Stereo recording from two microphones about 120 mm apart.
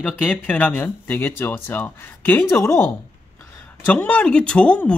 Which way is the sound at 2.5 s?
25° left (ahead or behind).